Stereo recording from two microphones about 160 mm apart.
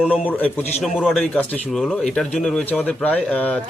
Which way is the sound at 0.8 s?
Centre (ahead or behind).